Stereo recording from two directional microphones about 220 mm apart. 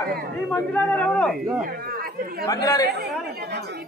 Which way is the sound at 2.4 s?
15° left (ahead or behind).